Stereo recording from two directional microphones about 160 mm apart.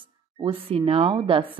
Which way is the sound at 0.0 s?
30° right (ahead or behind).